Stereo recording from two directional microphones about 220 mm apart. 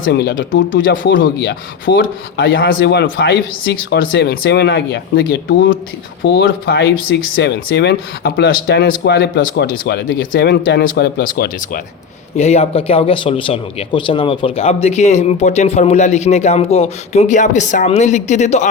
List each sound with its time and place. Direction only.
0.0 s speech: 50° left (ahead or behind)
12.4 s speech: 30° left (ahead or behind)